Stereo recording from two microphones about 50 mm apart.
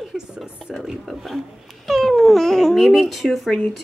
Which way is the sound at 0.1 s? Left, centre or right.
Centre.